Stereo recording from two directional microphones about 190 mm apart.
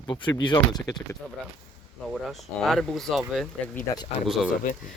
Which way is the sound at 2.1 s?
Centre (ahead or behind).